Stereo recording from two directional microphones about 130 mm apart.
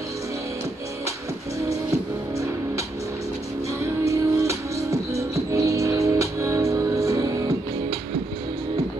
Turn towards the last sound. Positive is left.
turn(degrees=-25)  # may be behind; listen again after turning